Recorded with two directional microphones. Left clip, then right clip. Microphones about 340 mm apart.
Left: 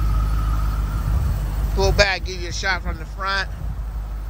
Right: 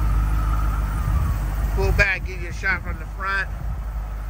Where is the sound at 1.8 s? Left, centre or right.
Centre.